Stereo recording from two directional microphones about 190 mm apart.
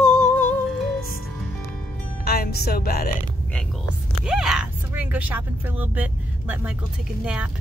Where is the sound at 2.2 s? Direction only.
55° left (ahead or behind).